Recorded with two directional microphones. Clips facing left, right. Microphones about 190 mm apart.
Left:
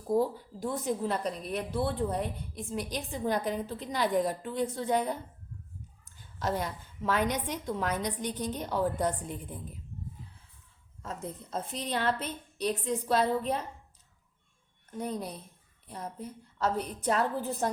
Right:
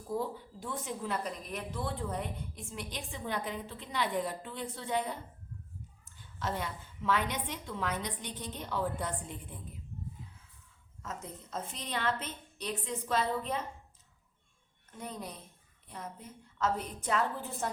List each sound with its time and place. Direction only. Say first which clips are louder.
0.1 s a woman's voice: left 8 dB; 40° left (ahead or behind)
6.4 s a woman's voice: left 4 dB; 40° left (ahead or behind)
11.0 s a woman's voice: left 4 dB; 30° left (ahead or behind)
14.9 s a woman's voice: left 7 dB; 35° left (ahead or behind)